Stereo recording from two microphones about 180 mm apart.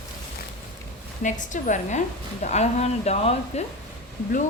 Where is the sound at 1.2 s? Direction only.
45° left (ahead or behind).